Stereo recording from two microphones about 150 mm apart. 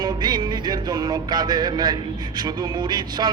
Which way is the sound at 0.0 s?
30° right (ahead or behind).